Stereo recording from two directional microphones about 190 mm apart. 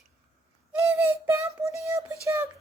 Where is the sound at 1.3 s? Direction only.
15° right (ahead or behind).